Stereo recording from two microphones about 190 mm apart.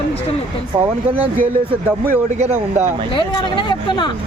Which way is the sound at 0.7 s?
20° right (ahead or behind).